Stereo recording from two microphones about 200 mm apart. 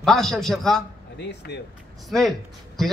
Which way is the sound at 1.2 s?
60° left (ahead or behind).